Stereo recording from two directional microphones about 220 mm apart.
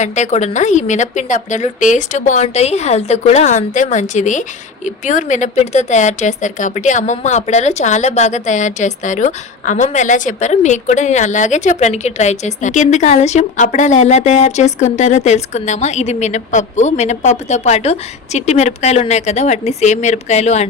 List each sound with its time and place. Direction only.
0.0 s speech: 30° left (ahead or behind)